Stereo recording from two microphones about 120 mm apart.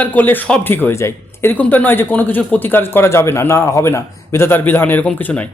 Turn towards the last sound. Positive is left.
turn(degrees=15)  # may be behind; listen again after turning